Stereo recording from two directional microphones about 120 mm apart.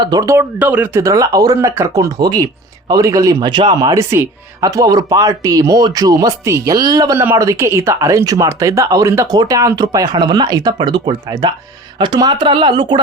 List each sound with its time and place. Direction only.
0.0 s speech: 35° right (ahead or behind)
0.6 s speech: 15° right (ahead or behind)
1.0 s speech: 30° right (ahead or behind)
7.2 s speech: 25° right (ahead or behind); by 13.0 s 40° right (ahead or behind)